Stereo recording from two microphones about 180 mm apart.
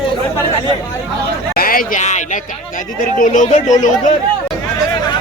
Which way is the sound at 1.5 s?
50° left (ahead or behind).